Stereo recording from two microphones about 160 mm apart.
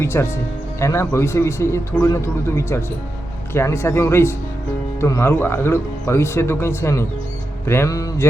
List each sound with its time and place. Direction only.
0.0 s speech: 15° left (ahead or behind)
7.7 s mantra: 20° left (ahead or behind)